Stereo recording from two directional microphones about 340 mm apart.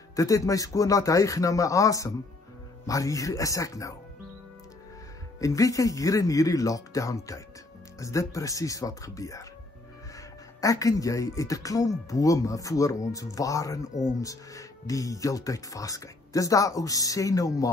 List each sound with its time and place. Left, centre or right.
0.1 s speech: centre
5.4 s speech: centre
10.6 s speech: centre